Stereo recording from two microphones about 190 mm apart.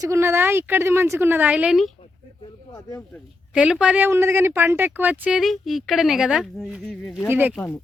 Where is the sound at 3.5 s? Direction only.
5° right (ahead or behind).